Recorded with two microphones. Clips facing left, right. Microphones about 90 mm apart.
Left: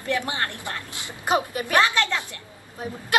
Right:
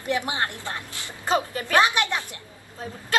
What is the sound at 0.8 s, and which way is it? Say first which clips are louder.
Speech: left 2 dB; 20° left (ahead or behind).